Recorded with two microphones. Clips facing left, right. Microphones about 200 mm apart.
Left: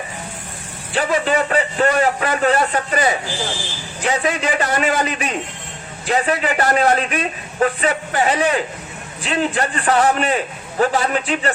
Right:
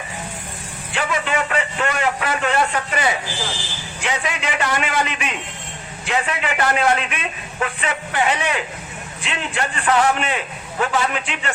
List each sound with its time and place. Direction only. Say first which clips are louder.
0.9 s a man's voice: left 5 dB; 35° left (ahead or behind)